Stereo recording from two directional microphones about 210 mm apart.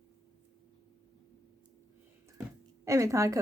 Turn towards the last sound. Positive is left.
turn(degrees=-15)  # may be behind; listen again after turning